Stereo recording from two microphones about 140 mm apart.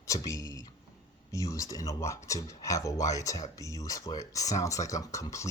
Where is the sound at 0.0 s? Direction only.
25° left (ahead or behind).